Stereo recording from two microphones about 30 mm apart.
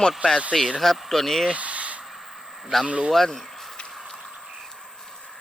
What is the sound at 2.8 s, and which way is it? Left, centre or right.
Speech, right.